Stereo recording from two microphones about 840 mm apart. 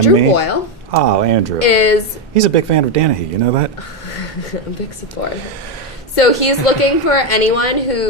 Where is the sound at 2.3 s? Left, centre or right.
Right.